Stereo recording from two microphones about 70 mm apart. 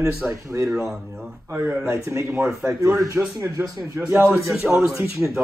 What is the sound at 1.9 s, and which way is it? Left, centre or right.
Speech, right.